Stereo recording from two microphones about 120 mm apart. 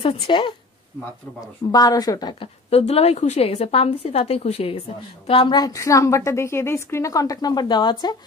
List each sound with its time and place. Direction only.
0.0 s a woman's voice: 45° left (ahead or behind)
1.7 s speech: 30° left (ahead or behind)
2.4 s a woman's voice: 60° left (ahead or behind)
5.6 s a woman's voice: 30° left (ahead or behind)